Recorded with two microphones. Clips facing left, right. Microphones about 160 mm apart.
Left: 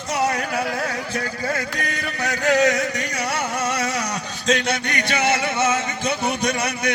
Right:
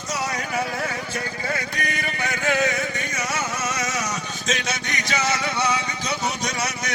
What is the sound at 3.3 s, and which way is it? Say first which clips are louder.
Vehicle: left 4 dB; 60° left (ahead or behind).